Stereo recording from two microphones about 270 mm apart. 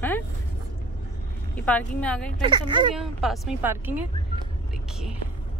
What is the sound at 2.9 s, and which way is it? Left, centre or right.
Speech, centre.